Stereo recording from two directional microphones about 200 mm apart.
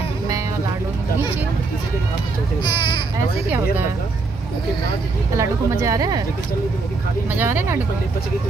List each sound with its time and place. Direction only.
2.6 s speech: 20° left (ahead or behind)
3.4 s speech: 10° right (ahead or behind)
5.3 s speech: 15° right (ahead or behind)
7.3 s speech: 10° right (ahead or behind)